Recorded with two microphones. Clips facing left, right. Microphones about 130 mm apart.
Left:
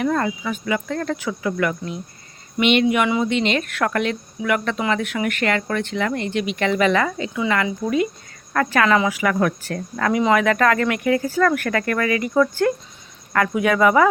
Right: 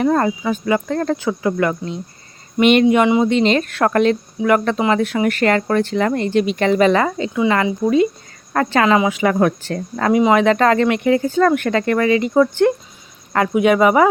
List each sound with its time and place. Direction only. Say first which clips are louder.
0.0 s speech: right 5 dB; 35° right (ahead or behind)
2.6 s a woman's voice: right 5 dB; 45° right (ahead or behind); by 14.1 s 20° right (ahead or behind)